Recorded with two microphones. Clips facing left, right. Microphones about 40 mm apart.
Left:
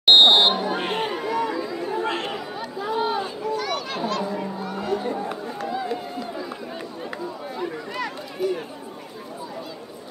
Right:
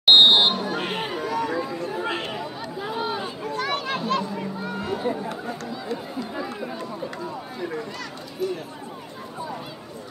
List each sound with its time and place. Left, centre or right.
0.0 s chatter: centre
3.4 s chatter: centre
4.6 s a sound: centre
5.1 s speech: centre
5.6 s speech: centre
6.3 s speech: right
7.5 s speech: centre
7.9 s speech: centre